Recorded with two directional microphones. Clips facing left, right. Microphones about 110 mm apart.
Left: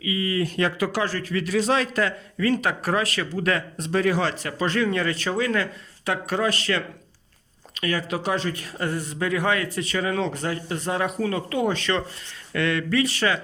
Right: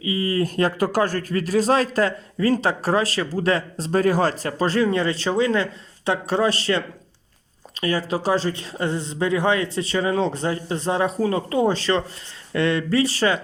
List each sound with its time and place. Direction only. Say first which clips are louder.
0.0 s a man's voice: right 3 dB; 35° right (ahead or behind)